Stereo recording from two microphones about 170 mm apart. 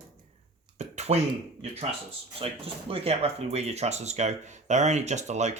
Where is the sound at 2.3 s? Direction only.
35° right (ahead or behind).